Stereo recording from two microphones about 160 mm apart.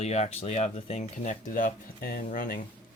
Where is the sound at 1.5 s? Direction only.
65° left (ahead or behind).